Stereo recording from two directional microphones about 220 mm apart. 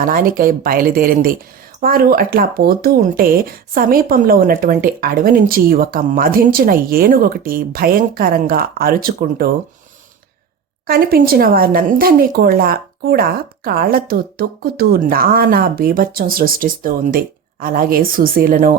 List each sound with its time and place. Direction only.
0.0 s speech: 40° right (ahead or behind)
10.8 s speech: 45° right (ahead or behind)